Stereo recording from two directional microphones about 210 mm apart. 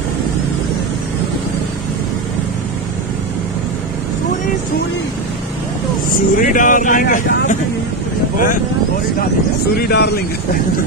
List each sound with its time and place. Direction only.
6.0 s speech: 40° left (ahead or behind)
9.8 s speech: 50° left (ahead or behind)